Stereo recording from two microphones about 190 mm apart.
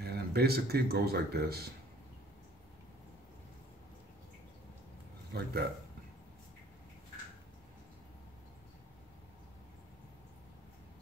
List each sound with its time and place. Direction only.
0.0 s speech: 55° right (ahead or behind)
5.3 s speech: 55° right (ahead or behind)